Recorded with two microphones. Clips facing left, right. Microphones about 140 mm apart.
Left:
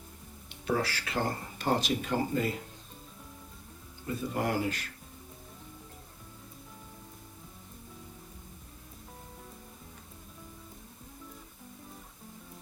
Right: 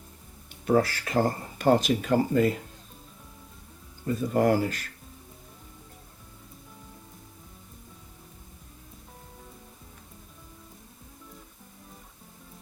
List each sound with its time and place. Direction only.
0.6 s speech: 45° right (ahead or behind)
4.0 s speech: 45° right (ahead or behind)